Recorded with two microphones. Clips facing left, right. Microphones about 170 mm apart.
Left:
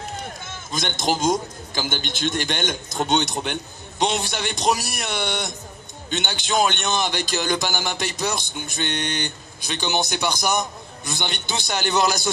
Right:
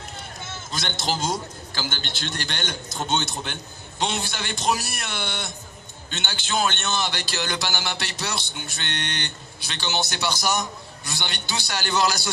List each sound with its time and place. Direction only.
0.7 s a man's voice: 15° left (ahead or behind)